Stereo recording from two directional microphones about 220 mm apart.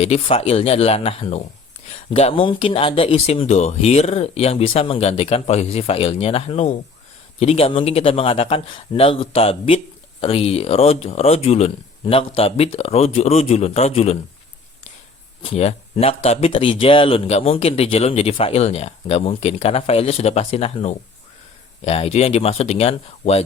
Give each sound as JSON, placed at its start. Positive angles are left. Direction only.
{"t": 0.0, "sound": "speech", "side_deg": 25}
{"t": 15.4, "sound": "speech", "side_deg": 30}